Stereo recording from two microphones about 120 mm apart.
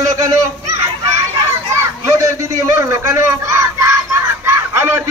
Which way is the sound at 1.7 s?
25° right (ahead or behind).